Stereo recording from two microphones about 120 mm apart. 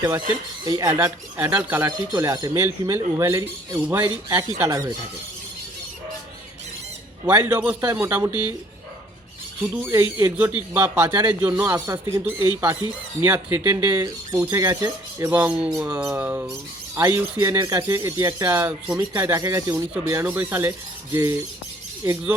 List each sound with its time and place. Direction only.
0.0 s speech: 20° right (ahead or behind)
0.6 s speech: 30° right (ahead or behind)
0.9 s speech: 15° right (ahead or behind)
2.1 s speech: 30° right (ahead or behind); by 4.0 s 10° right (ahead or behind)
4.0 s speech: 25° right (ahead or behind)
7.3 s speech: 20° right (ahead or behind)
8.3 s speech: 40° left (ahead or behind)
9.8 s speech: 20° right (ahead or behind)